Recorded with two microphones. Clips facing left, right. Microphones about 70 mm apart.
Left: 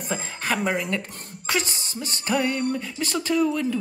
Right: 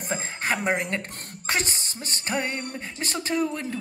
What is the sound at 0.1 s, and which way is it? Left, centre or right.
A woman's voice, right.